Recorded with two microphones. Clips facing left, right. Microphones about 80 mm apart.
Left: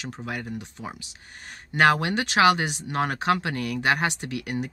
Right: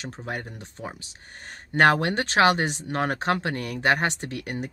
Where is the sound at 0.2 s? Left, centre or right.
Right.